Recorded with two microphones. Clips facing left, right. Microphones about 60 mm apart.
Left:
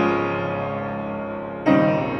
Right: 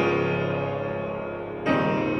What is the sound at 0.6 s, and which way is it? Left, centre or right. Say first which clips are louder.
Music: left 2 dB; left.